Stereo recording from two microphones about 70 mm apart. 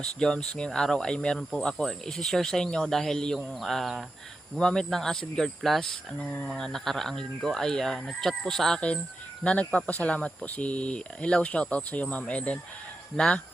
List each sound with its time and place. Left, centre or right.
0.2 s speech: centre
9.4 s speech: centre